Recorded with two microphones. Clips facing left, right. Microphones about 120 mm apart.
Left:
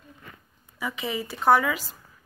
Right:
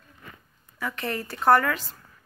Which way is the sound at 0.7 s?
5° left (ahead or behind).